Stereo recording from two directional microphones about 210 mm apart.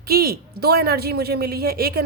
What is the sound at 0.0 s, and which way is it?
A man's voice, 45° right (ahead or behind).